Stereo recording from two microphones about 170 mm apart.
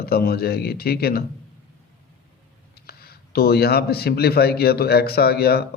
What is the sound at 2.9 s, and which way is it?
Speech, 65° left (ahead or behind).